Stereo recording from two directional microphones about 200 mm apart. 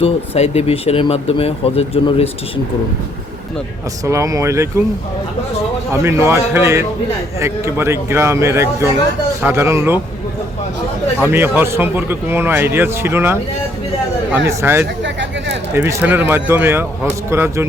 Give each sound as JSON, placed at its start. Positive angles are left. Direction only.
{"t": 0.0, "sound": "speech", "side_deg": 30}
{"t": 4.0, "sound": "a man's voice", "side_deg": -15}
{"t": 5.9, "sound": "a man's voice", "side_deg": -15}
{"t": 11.2, "sound": "a man's voice", "side_deg": -10}
{"t": 15.0, "sound": "a sound", "side_deg": -65}
{"t": 15.7, "sound": "a man's voice", "side_deg": -10}